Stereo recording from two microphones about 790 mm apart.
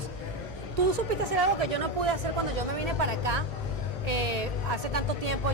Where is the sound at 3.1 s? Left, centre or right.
Right.